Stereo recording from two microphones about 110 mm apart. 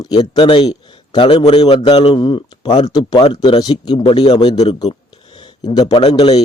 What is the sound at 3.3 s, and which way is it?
Speech, 55° left (ahead or behind).